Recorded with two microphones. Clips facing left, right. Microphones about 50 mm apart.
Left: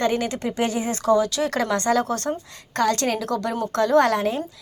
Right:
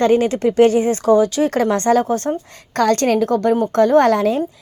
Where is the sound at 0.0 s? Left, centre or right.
Right.